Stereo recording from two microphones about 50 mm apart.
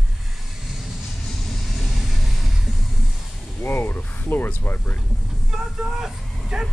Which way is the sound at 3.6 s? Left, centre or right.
Left.